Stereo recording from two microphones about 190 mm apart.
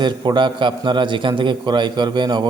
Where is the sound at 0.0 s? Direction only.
25° right (ahead or behind).